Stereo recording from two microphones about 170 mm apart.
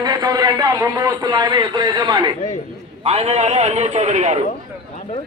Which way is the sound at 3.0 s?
35° right (ahead or behind).